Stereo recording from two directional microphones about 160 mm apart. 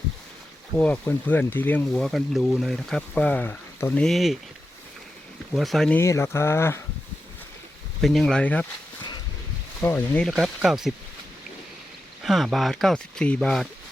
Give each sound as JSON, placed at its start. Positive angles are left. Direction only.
{"t": 0.8, "sound": "speech", "side_deg": 10}
{"t": 1.9, "sound": "speech", "side_deg": 0}
{"t": 5.5, "sound": "speech", "side_deg": 0}
{"t": 6.0, "sound": "speech", "side_deg": 15}
{"t": 8.0, "sound": "speech", "side_deg": 5}
{"t": 9.8, "sound": "speech", "side_deg": 10}
{"t": 12.2, "sound": "speech", "side_deg": 0}